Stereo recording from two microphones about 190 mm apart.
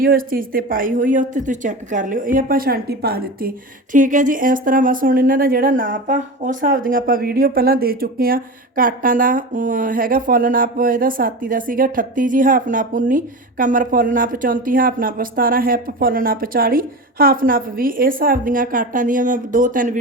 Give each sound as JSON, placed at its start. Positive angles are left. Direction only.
{"t": 0.0, "sound": "speech", "side_deg": -50}
{"t": 3.9, "sound": "speech", "side_deg": -40}